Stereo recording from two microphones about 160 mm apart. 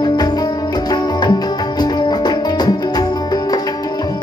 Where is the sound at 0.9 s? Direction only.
25° left (ahead or behind).